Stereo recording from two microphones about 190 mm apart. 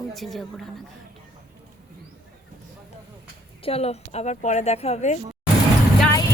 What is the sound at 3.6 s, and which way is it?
Speech, 30° left (ahead or behind).